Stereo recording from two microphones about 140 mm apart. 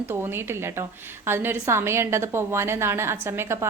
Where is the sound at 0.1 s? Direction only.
15° right (ahead or behind).